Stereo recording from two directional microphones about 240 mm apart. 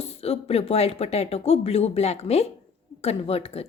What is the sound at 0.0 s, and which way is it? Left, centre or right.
Speech, left.